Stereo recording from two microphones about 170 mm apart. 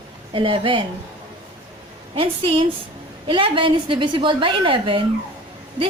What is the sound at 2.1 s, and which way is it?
A woman's voice, 30° right (ahead or behind).